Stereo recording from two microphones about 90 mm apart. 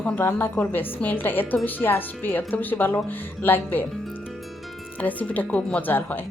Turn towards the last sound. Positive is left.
turn(degrees=20)  # may be behind; listen again after turning